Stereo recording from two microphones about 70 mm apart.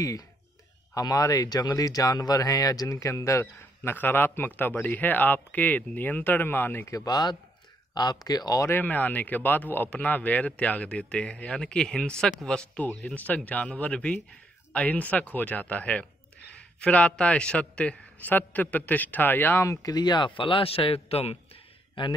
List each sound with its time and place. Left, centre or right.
0.9 s speech: left
3.9 s a man's voice: left
7.1 s speech: left
7.9 s speech: left
8.6 s a man's voice: left
19.6 s speech: left